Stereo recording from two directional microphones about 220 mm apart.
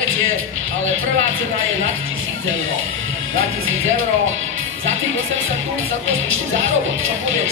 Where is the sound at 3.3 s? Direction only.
65° right (ahead or behind).